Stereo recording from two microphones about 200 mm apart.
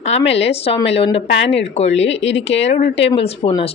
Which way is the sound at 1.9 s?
65° left (ahead or behind).